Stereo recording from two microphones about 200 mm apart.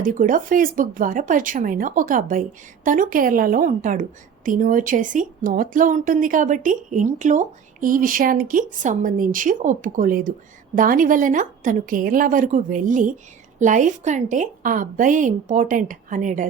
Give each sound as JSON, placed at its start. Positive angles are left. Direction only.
{"t": 0.0, "sound": "a woman's voice", "side_deg": -40}